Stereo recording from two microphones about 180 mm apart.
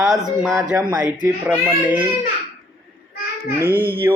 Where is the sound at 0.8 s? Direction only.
20° right (ahead or behind).